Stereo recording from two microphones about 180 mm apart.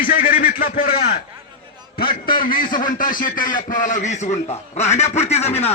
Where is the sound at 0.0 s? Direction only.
50° left (ahead or behind).